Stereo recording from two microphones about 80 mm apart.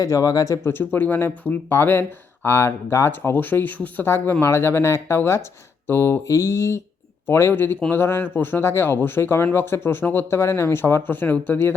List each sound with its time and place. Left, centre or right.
0.0 s speech: left
0.6 s speech: left
6.2 s mantra: left
7.3 s speech: left